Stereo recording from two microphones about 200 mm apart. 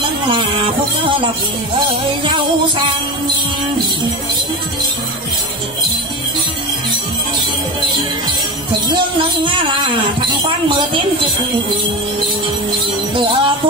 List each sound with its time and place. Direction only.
1.0 s speech: 25° right (ahead or behind)
8.9 s speech: 25° right (ahead or behind)
13.1 s music: 25° right (ahead or behind)